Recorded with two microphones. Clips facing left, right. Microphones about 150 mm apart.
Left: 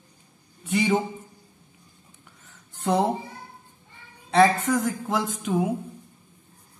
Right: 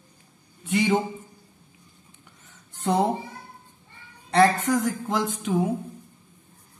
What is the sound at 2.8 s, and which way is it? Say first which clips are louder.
Speech: even; centre (ahead or behind).